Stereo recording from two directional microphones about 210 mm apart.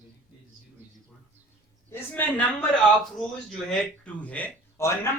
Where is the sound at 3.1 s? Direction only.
Centre (ahead or behind).